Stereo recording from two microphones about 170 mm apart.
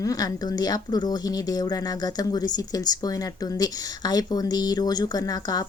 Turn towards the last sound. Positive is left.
turn(degrees=20)  # may be behind; listen again after turning